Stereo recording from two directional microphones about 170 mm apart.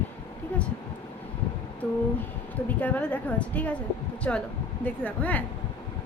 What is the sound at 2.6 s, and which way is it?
A woman's voice, 10° left (ahead or behind).